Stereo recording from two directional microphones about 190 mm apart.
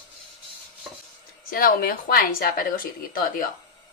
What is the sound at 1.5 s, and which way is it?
Speech, 50° left (ahead or behind).